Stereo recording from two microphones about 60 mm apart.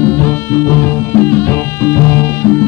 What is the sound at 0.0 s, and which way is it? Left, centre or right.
Music, left.